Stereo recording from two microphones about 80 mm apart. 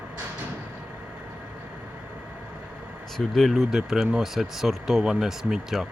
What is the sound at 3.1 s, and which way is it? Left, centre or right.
Speech, centre.